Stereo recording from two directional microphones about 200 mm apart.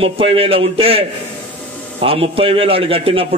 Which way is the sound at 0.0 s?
30° right (ahead or behind).